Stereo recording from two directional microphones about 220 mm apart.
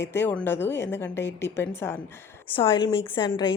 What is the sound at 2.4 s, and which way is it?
A woman's voice, 25° left (ahead or behind).